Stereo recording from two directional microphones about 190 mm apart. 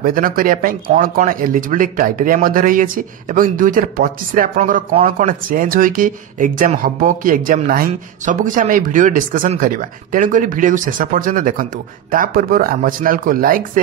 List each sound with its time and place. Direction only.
0.0 s speech: 50° right (ahead or behind)